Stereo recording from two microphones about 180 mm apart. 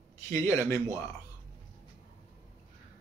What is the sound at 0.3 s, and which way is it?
Speech, 15° left (ahead or behind).